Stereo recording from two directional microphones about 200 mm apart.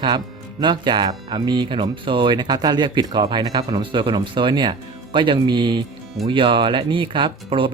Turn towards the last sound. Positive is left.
turn(degrees=-25)  # may be behind; listen again after turning